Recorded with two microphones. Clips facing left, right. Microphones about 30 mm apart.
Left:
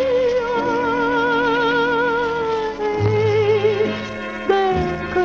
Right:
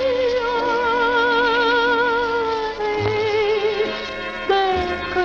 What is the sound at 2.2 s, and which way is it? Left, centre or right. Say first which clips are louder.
Music: even; right.